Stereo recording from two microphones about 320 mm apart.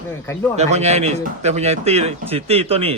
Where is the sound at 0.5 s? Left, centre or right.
Right.